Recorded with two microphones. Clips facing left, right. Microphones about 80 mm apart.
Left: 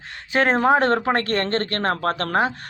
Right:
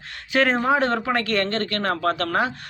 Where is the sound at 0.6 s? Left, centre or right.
Left.